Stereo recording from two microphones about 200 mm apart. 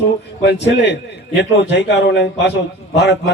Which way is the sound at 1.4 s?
60° left (ahead or behind).